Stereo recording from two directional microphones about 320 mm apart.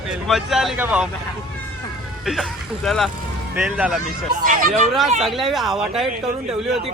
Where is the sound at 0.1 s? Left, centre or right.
Centre.